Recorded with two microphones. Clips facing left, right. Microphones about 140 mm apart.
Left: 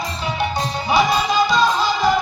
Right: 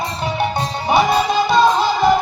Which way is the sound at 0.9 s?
55° right (ahead or behind).